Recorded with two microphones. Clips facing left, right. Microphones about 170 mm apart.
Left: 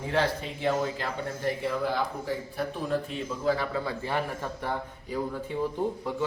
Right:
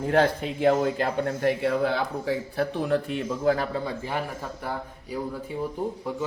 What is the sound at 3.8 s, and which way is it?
Speech, 15° right (ahead or behind).